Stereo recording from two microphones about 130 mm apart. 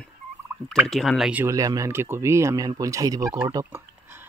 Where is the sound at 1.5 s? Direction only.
25° right (ahead or behind).